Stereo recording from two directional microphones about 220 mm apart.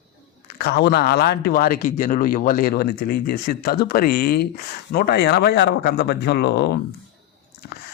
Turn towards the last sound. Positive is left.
turn(degrees=50)  # may be behind; listen again after turning